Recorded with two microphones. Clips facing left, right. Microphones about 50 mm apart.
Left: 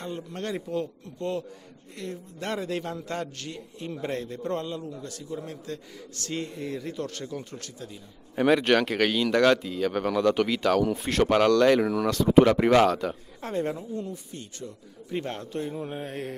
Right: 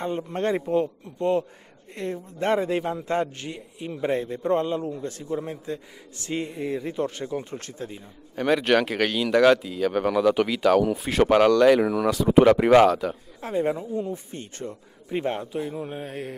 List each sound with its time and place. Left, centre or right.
0.0 s a man's voice: right
8.4 s speech: centre
13.7 s a man's voice: centre
14.1 s speech: right
15.0 s a man's voice: centre
15.6 s speech: centre